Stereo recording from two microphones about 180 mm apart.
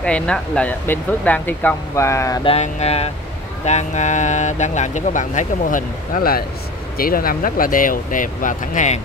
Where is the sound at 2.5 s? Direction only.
35° left (ahead or behind).